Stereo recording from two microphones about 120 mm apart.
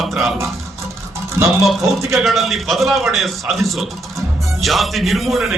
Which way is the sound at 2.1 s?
Centre (ahead or behind).